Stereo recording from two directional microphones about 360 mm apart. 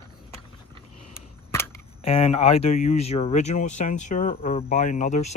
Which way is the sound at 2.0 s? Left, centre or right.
Centre.